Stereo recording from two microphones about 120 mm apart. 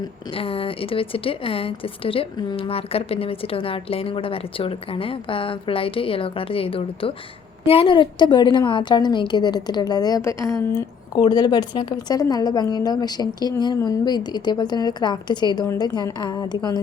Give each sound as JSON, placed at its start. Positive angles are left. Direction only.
{"t": 0.3, "sound": "a woman's voice", "side_deg": 50}
{"t": 11.2, "sound": "a woman's voice", "side_deg": 35}
{"t": 15.6, "sound": "a woman's voice", "side_deg": 20}
{"t": 15.9, "sound": "a woman's voice", "side_deg": 35}